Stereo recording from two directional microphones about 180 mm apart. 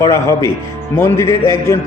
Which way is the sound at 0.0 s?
15° left (ahead or behind).